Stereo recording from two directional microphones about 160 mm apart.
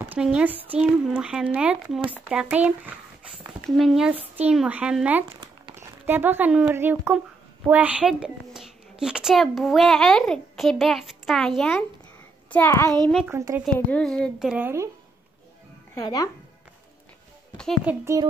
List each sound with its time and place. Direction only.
0.0 s a child's voice: 10° right (ahead or behind); by 12.9 s 15° left (ahead or behind)
13.3 s speech: 20° right (ahead or behind)
13.7 s a child's voice: 5° left (ahead or behind)
14.5 s speech: 15° right (ahead or behind)
15.9 s speech: 20° left (ahead or behind)
17.8 s speech: 15° right (ahead or behind)